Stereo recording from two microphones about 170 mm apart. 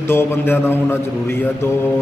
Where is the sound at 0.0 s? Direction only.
15° left (ahead or behind).